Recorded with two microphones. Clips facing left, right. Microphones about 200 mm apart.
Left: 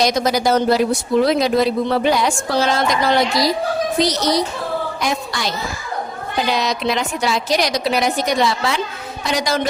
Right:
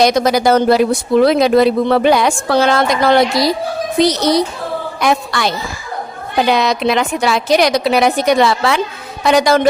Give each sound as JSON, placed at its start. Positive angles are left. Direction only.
{"t": 0.0, "sound": "a woman's voice", "side_deg": -60}